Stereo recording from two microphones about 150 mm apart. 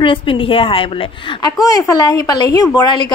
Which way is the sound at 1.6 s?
20° left (ahead or behind).